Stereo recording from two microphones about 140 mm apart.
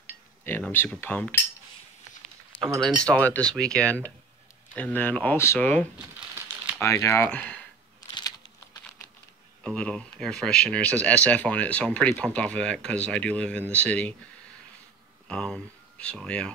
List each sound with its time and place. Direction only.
0.4 s speech: 15° left (ahead or behind)
3.0 s speech: 10° left (ahead or behind)
5.9 s crumpling: 15° right (ahead or behind)
6.8 s speech: 20° left (ahead or behind)
7.2 s speech: 10° left (ahead or behind)
8.1 s a sound: 25° left (ahead or behind)
9.6 s speech: 5° left (ahead or behind)
15.2 s speech: 5° left (ahead or behind)